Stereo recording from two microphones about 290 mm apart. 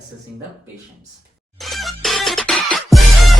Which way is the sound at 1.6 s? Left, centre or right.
Centre.